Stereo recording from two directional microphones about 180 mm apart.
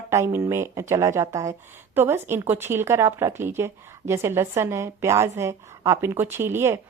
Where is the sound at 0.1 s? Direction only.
15° right (ahead or behind).